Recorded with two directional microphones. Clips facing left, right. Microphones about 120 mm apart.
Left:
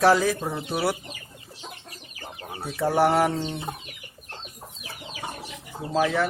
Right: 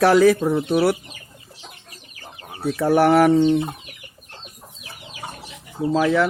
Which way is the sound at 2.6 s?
75° right (ahead or behind).